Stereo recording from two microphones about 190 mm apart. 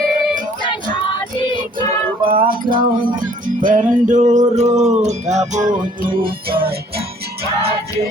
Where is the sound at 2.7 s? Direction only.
45° right (ahead or behind).